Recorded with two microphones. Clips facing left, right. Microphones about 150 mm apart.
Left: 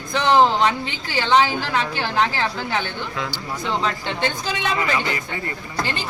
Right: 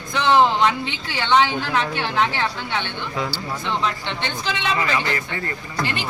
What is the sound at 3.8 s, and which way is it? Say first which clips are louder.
Speech: left 2 dB; 40° left (ahead or behind).